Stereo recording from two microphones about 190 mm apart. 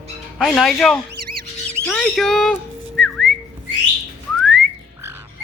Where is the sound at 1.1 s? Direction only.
55° right (ahead or behind).